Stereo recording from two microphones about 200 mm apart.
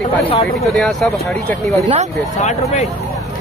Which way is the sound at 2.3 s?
35° left (ahead or behind).